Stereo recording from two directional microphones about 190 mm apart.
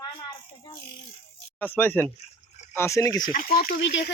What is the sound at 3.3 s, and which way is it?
Speech, 50° left (ahead or behind).